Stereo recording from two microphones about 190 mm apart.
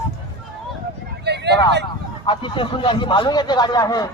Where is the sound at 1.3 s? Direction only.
60° right (ahead or behind).